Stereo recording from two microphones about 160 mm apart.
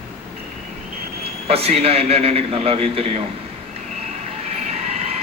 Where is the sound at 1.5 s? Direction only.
40° right (ahead or behind).